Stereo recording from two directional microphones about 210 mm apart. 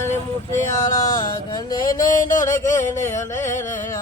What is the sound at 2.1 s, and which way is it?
Music, 40° left (ahead or behind).